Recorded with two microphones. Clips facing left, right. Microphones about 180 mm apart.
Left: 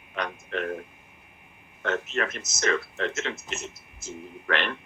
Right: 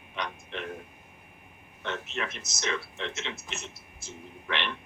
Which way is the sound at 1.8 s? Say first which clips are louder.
Left 6 dB; 45° left (ahead or behind).